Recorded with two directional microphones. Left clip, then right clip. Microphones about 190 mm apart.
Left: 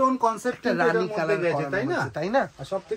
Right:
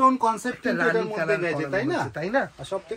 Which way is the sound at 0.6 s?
35° left (ahead or behind).